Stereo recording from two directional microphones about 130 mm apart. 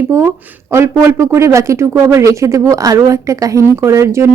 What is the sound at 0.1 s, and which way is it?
Speech, 20° right (ahead or behind).